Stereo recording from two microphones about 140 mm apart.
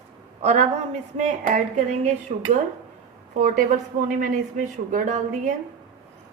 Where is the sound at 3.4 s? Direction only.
70° right (ahead or behind).